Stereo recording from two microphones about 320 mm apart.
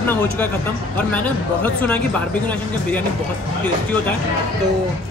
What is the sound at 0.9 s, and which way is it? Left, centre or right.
Speech, centre.